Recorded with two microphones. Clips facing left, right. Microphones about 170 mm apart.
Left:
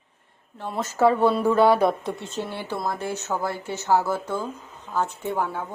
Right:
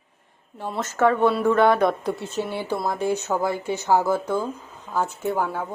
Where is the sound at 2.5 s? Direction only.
15° right (ahead or behind).